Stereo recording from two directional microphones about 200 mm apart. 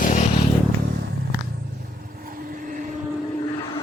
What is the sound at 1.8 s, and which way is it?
Vehicle, 45° right (ahead or behind).